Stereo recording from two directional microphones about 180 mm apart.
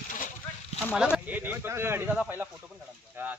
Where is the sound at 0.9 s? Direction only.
5° right (ahead or behind).